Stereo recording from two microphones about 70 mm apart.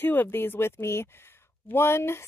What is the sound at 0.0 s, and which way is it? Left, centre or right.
A woman's voice, left.